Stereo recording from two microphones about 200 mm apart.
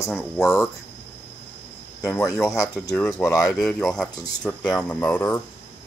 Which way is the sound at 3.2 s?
15° left (ahead or behind).